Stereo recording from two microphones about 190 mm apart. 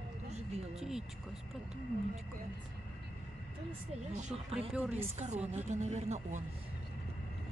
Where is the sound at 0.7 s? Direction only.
Centre (ahead or behind).